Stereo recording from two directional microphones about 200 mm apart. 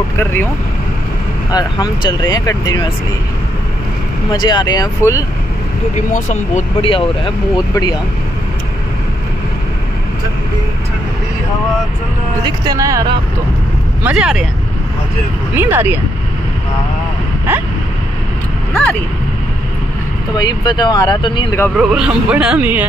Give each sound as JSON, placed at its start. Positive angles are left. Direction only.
{"t": 0.2, "sound": "speech", "side_deg": 10}
{"t": 1.5, "sound": "speech", "side_deg": 20}
{"t": 4.3, "sound": "speech", "side_deg": 20}
{"t": 5.9, "sound": "speech", "side_deg": 40}
{"t": 12.4, "sound": "speech", "side_deg": -20}
{"t": 14.0, "sound": "speech", "side_deg": -5}
{"t": 15.5, "sound": "speech", "side_deg": -10}
{"t": 17.5, "sound": "a sound", "side_deg": -10}
{"t": 18.7, "sound": "vehicle", "side_deg": 10}
{"t": 20.3, "sound": "speech", "side_deg": 20}
{"t": 21.7, "sound": "speech", "side_deg": -5}